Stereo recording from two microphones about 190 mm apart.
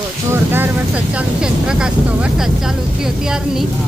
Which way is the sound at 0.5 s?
10° right (ahead or behind).